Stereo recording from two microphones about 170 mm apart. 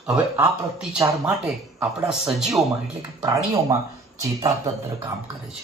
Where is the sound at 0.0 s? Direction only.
5° right (ahead or behind).